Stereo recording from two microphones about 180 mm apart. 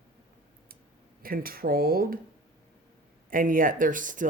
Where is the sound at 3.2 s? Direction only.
50° right (ahead or behind).